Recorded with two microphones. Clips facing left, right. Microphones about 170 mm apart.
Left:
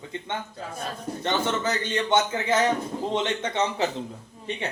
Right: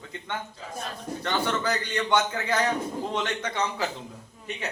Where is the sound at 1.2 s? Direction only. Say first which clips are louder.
Left 1 dB; 20° left (ahead or behind).